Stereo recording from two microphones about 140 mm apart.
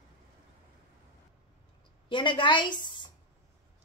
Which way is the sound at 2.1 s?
35° left (ahead or behind).